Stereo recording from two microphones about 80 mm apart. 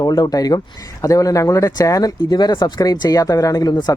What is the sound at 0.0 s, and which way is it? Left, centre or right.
Speech, left.